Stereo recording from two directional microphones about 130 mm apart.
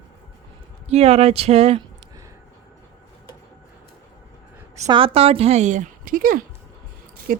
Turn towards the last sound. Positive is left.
turn(degrees=-90)